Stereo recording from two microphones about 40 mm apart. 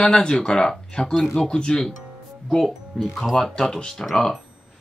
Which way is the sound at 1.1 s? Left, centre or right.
Centre.